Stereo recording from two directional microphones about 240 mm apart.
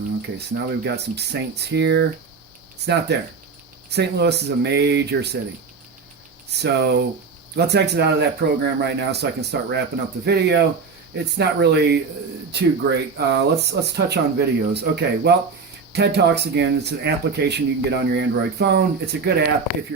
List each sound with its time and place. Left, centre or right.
0.3 s speech: right
6.5 s speech: right